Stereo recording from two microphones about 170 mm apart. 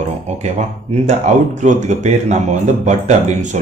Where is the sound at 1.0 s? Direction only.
45° right (ahead or behind).